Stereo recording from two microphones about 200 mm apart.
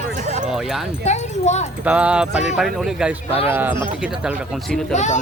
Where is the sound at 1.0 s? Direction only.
35° left (ahead or behind).